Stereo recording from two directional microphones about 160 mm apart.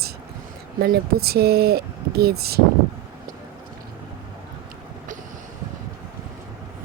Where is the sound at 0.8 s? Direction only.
70° right (ahead or behind).